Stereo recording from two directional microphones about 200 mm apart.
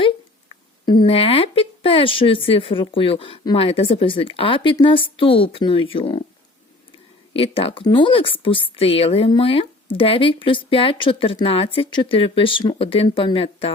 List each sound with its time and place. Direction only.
0.0 s speech: 25° left (ahead or behind)
7.3 s speech: 30° left (ahead or behind)